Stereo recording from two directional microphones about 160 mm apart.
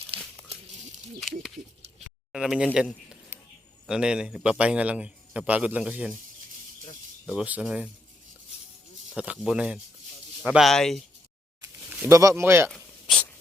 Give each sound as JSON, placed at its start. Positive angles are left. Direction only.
{"t": 2.3, "sound": "speech", "side_deg": -5}
{"t": 2.7, "sound": "a sound", "side_deg": -5}
{"t": 3.8, "sound": "a man's voice", "side_deg": -5}
{"t": 7.4, "sound": "a man's voice", "side_deg": -5}
{"t": 9.1, "sound": "a man's voice", "side_deg": -5}
{"t": 11.6, "sound": "speech", "side_deg": -15}
{"t": 12.7, "sound": "a sound", "side_deg": 5}